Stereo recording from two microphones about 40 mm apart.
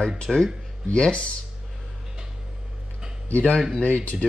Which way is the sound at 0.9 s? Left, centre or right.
Left.